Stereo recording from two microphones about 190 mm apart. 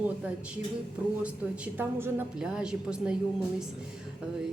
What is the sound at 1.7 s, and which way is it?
A man's voice, 10° right (ahead or behind).